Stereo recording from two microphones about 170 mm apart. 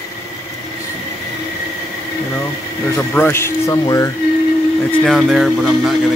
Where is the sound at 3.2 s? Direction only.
15° left (ahead or behind).